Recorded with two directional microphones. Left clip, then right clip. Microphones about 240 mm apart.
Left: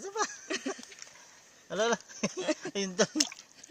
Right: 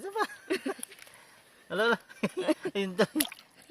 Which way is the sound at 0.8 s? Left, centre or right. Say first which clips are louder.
Left 1 dB; right.